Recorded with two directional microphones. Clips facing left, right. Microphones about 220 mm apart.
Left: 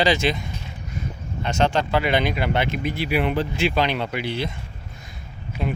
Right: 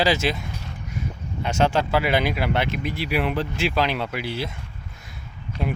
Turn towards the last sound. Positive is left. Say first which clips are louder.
# even
turn(degrees=5)  # may be behind; listen again after turning